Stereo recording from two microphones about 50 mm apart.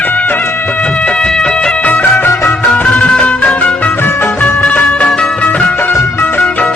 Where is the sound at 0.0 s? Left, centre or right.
Left.